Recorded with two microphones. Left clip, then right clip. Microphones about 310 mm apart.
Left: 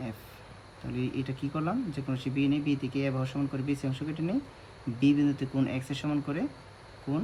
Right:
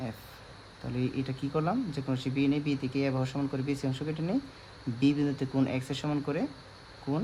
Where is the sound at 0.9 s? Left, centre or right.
Right.